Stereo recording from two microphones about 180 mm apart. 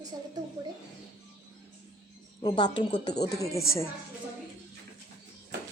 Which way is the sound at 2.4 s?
25° left (ahead or behind).